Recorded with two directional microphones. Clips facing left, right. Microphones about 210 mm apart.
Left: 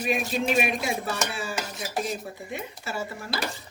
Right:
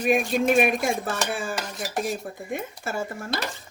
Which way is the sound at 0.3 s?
50° right (ahead or behind).